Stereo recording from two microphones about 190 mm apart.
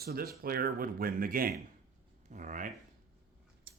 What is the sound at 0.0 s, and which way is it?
Speech, 55° right (ahead or behind).